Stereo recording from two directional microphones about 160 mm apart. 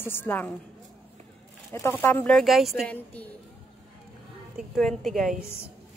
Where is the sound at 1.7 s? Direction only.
15° left (ahead or behind); by 2.9 s centre (ahead or behind).